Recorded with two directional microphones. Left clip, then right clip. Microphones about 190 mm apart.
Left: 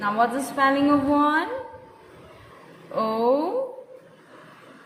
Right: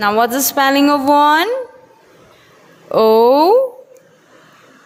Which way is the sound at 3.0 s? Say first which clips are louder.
Right 12 dB; 60° right (ahead or behind).